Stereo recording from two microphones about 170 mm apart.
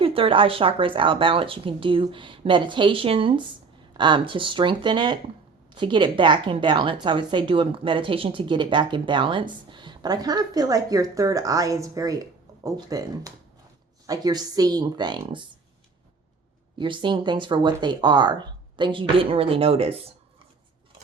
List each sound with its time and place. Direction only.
0.0 s a woman's voice: 30° right (ahead or behind)
16.7 s a woman's voice: 30° right (ahead or behind)